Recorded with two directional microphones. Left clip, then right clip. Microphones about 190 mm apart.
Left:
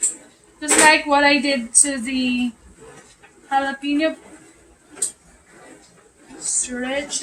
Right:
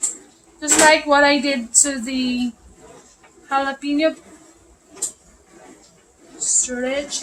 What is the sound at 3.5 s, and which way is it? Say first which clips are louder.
Speech: even; 5° right (ahead or behind).